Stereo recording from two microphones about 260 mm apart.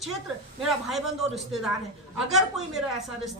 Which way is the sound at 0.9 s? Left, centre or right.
Centre.